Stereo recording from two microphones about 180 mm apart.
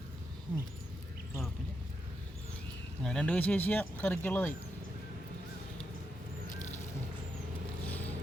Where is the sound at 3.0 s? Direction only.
5° left (ahead or behind).